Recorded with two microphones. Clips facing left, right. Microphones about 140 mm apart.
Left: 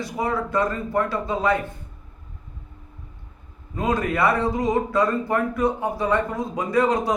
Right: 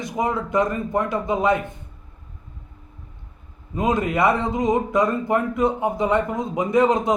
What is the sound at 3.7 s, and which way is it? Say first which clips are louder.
Speech: right 2 dB; 20° right (ahead or behind).